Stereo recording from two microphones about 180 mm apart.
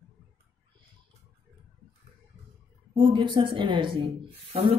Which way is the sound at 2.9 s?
25° right (ahead or behind).